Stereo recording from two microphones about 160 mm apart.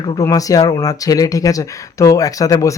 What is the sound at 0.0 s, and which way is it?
Speech, 25° left (ahead or behind).